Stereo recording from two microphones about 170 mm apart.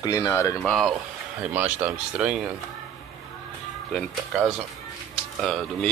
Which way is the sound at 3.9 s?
Centre (ahead or behind).